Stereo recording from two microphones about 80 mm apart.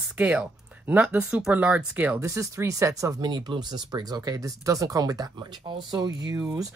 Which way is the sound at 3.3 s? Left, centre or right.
Right.